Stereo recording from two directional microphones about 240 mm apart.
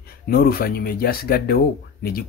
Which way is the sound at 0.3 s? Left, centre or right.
Left.